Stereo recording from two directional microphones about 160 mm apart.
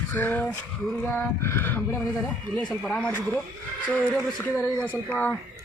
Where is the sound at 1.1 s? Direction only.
15° left (ahead or behind).